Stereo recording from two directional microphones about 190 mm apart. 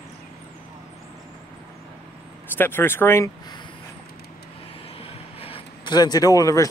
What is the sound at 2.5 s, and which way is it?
Speech, 10° left (ahead or behind).